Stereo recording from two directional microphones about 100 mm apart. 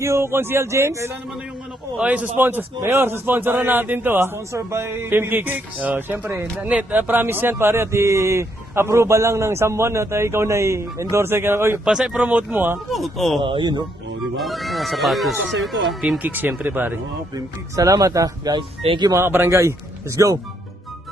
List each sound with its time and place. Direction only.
0.0 s speech: 25° right (ahead or behind)
2.0 s speech: 15° right (ahead or behind)
11.9 s speech: 5° right (ahead or behind)
12.9 s speech: centre (ahead or behind)
13.4 s a man's voice: 55° right (ahead or behind)
14.3 s speech: centre (ahead or behind)
16.2 s speech: 20° right (ahead or behind)
17.3 s speech: 35° right (ahead or behind)
18.8 s speech: 65° right (ahead or behind)
19.0 s speech: 30° right (ahead or behind)